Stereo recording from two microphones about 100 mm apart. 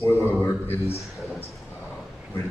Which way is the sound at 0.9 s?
Centre (ahead or behind).